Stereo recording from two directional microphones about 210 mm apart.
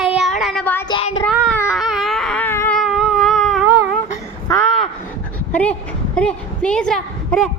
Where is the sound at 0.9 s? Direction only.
25° left (ahead or behind).